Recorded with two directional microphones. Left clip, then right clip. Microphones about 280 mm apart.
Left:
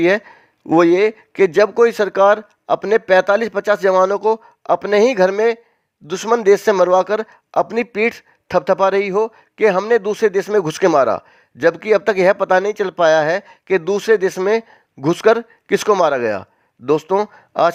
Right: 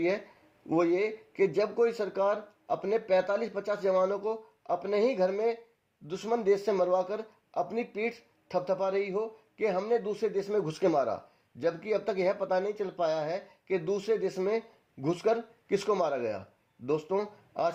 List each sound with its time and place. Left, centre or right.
0.7 s speech: left